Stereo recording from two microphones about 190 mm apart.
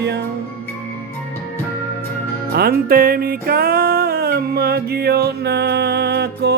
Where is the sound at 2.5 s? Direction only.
55° right (ahead or behind).